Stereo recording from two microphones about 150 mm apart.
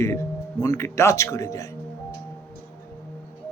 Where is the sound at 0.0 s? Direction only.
20° left (ahead or behind).